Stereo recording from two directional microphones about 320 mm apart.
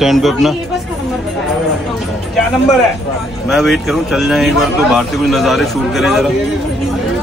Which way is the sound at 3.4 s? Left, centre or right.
Centre.